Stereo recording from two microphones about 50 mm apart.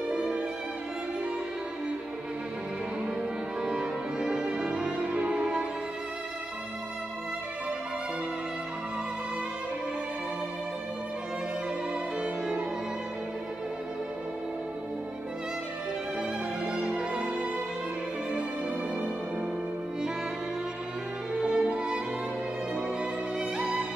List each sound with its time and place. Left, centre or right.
0.1 s violin: centre
3.6 s music: centre
12.2 s violin: centre
16.2 s music: right
21.4 s music: centre
23.6 s music: centre